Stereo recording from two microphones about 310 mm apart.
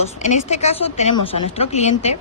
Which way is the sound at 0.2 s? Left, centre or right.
Left.